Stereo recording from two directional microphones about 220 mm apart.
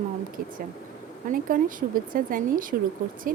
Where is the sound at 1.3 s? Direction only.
40° right (ahead or behind).